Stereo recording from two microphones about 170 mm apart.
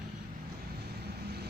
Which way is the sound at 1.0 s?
70° right (ahead or behind).